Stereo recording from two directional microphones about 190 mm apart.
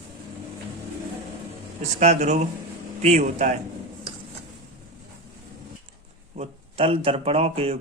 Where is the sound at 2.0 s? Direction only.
35° right (ahead or behind).